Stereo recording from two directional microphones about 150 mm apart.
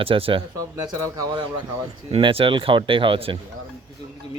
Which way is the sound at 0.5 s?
20° right (ahead or behind).